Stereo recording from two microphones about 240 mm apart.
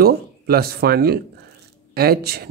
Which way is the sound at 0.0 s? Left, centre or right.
Right.